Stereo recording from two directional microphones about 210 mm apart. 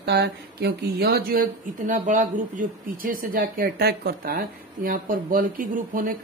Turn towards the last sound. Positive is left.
turn(degrees=-40)  # may be behind; listen again after turning